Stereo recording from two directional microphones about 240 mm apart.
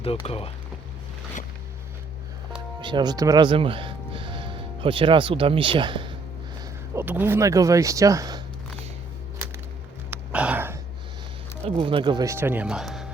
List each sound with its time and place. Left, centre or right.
0.0 s speech: left
2.8 s speech: centre
6.9 s speech: centre
10.1 s a sound: centre
11.7 s speech: right; by 13.1 s centre